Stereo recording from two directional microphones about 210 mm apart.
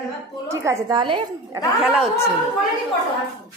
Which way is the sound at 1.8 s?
5° right (ahead or behind).